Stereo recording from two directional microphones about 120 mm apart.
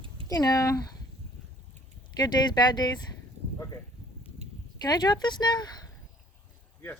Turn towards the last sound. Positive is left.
turn(degrees=35)  # may be behind; listen again after turning